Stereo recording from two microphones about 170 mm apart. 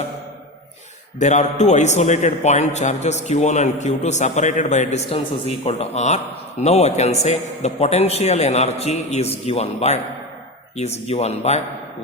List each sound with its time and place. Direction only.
1.2 s a man's voice: 45° left (ahead or behind)